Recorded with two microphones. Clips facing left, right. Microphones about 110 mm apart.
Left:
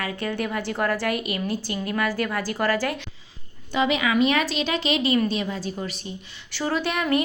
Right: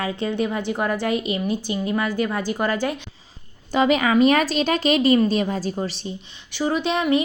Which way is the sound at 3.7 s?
40° right (ahead or behind).